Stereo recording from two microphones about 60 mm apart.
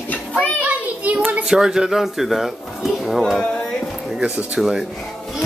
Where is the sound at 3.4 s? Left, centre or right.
Centre.